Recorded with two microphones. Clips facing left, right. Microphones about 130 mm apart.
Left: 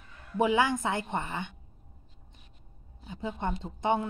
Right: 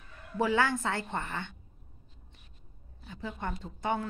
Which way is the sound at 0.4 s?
20° left (ahead or behind).